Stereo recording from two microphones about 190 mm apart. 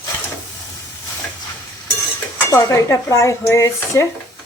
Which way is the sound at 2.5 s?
15° left (ahead or behind).